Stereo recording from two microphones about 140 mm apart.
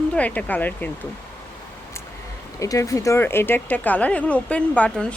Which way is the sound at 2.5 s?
25° left (ahead or behind).